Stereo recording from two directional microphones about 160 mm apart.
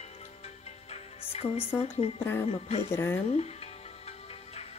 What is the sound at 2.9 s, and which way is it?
Speech, 15° left (ahead or behind).